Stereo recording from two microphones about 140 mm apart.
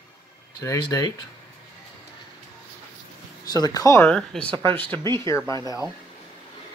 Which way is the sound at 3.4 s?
25° left (ahead or behind).